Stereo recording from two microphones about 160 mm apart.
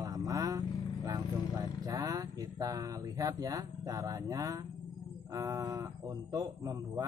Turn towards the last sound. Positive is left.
turn(degrees=-25)  # may be behind; listen again after turning